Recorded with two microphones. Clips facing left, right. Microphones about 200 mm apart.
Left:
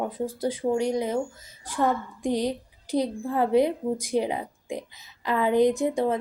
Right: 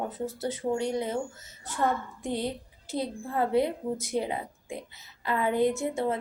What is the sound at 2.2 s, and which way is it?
A woman's voice, 15° left (ahead or behind).